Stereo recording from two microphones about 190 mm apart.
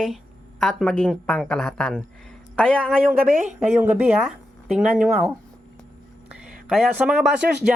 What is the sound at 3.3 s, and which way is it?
Speech, 45° right (ahead or behind).